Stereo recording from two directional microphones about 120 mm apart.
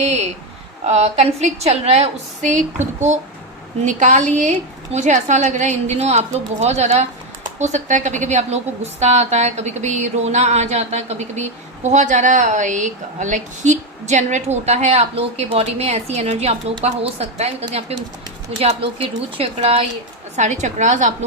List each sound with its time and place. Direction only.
0.0 s a woman's voice: 65° right (ahead or behind)
3.8 s a woman's voice: 90° right; by 7.1 s 70° right (ahead or behind)
7.6 s a woman's voice: 85° right; by 19.8 s 50° right (ahead or behind)
20.3 s a woman's voice: 75° right (ahead or behind)